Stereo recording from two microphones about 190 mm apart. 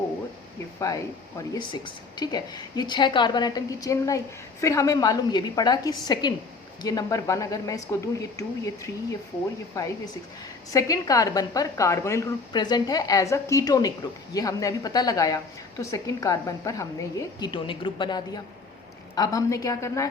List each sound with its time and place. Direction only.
0.8 s a woman's voice: 15° left (ahead or behind)
10.7 s a woman's voice: 15° left (ahead or behind)